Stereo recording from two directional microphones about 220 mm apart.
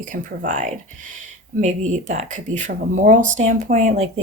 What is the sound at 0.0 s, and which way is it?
A woman's voice, 35° right (ahead or behind).